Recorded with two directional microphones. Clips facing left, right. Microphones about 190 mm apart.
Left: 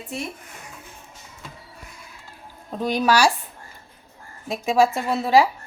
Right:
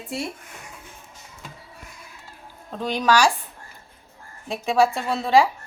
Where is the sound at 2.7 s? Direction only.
10° left (ahead or behind).